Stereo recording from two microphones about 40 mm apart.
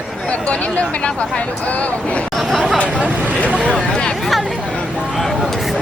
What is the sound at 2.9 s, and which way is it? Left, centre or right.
Speech, right.